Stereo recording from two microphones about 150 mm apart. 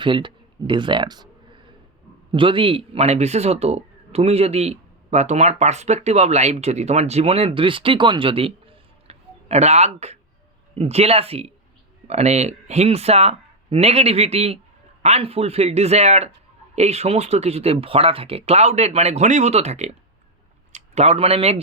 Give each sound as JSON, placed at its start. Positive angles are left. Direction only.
{"t": 0.0, "sound": "speech", "side_deg": -30}
{"t": 2.3, "sound": "speech", "side_deg": -35}